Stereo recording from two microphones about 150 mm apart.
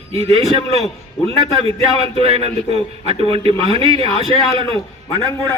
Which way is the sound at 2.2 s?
40° right (ahead or behind).